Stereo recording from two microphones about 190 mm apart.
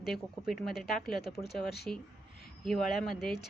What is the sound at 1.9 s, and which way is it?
Speech, 35° right (ahead or behind).